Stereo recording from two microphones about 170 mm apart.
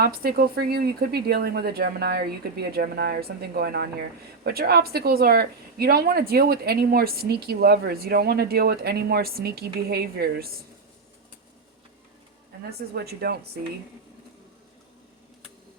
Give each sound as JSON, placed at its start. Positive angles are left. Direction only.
{"t": 0.0, "sound": "a woman's voice", "side_deg": -65}
{"t": 12.9, "sound": "a woman's voice", "side_deg": -70}